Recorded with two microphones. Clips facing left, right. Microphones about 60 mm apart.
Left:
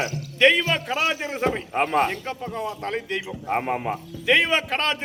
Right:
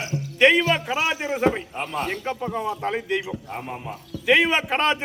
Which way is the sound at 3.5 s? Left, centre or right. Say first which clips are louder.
Left 8 dB; left.